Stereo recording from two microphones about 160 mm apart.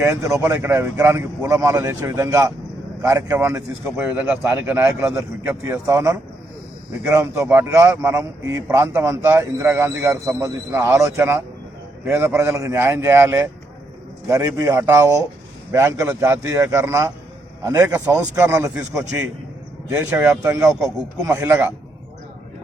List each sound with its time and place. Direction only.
0.0 s a man's voice: 20° right (ahead or behind)
7.3 s a man's voice: 15° right (ahead or behind)